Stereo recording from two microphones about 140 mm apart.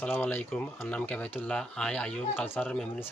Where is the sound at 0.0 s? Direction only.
15° left (ahead or behind).